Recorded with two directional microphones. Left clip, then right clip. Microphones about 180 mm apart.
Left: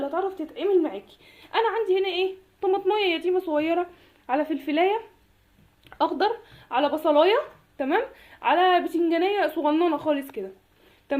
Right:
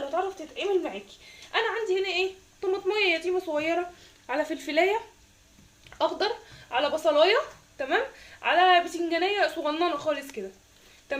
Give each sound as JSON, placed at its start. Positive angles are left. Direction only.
{"t": 0.5, "sound": "a woman's voice", "side_deg": 50}
{"t": 6.0, "sound": "a woman's voice", "side_deg": 40}
{"t": 11.1, "sound": "a sound", "side_deg": 50}